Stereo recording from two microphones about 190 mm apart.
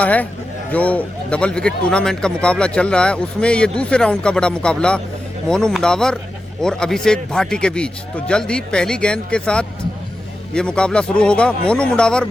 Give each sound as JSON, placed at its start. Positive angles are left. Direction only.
{"t": 0.0, "sound": "a man's voice", "side_deg": 10}